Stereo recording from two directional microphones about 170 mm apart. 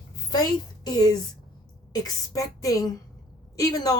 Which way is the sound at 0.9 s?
20° left (ahead or behind).